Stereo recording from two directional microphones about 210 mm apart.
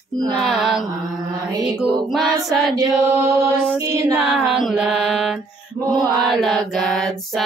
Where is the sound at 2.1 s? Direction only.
Centre (ahead or behind).